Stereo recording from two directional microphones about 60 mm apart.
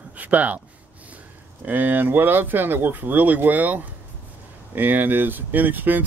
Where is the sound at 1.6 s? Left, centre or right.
Right.